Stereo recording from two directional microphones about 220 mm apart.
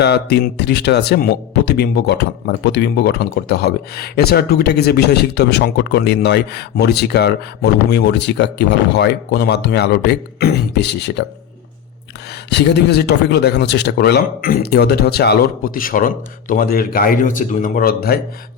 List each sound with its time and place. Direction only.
0.0 s speech: 50° left (ahead or behind)
12.5 s speech: 50° left (ahead or behind)